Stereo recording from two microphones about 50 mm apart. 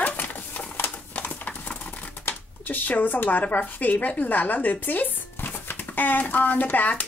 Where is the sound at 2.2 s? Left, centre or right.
Left.